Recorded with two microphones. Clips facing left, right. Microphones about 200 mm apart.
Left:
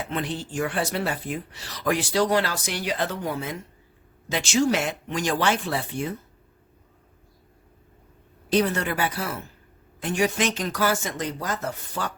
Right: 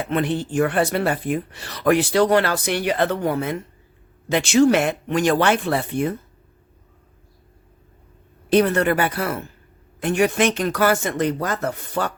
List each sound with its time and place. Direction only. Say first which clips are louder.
0.0 s speech: right 7 dB; 60° right (ahead or behind)
8.4 s speech: right 6 dB; 60° right (ahead or behind)